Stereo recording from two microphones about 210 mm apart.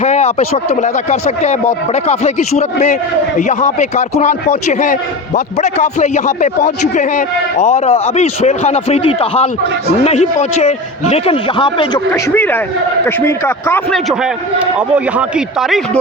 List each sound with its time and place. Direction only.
0.0 s a man's voice: 35° left (ahead or behind); by 13.8 s 10° left (ahead or behind)
13.9 s a man's voice: centre (ahead or behind)